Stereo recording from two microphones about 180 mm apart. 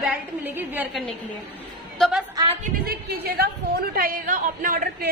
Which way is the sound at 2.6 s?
55° right (ahead or behind).